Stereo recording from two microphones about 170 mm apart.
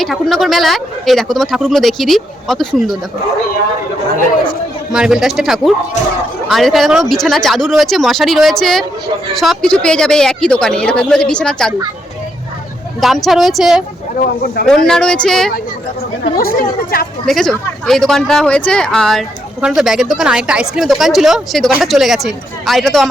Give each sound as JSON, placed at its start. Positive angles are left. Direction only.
{"t": 0.0, "sound": "speech", "side_deg": 0}
{"t": 4.9, "sound": "speech", "side_deg": -5}
{"t": 13.0, "sound": "speech", "side_deg": 0}
{"t": 14.8, "sound": "speech", "side_deg": 5}
{"t": 16.2, "sound": "speech", "side_deg": 55}
{"t": 17.2, "sound": "speech", "side_deg": 5}